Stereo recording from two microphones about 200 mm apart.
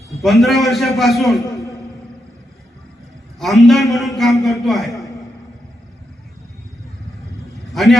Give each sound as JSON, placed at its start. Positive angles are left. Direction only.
{"t": 0.2, "sound": "a man's voice", "side_deg": 0}
{"t": 1.4, "sound": "a man's voice", "side_deg": 15}
{"t": 3.3, "sound": "a man's voice", "side_deg": 0}
{"t": 7.7, "sound": "vehicle", "side_deg": 0}